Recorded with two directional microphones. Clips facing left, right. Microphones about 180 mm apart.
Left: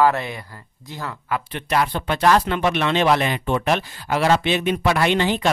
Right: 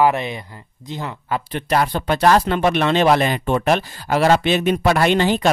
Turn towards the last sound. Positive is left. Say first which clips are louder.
# right 3 dB
turn(degrees=-40)  # may be behind; listen again after turning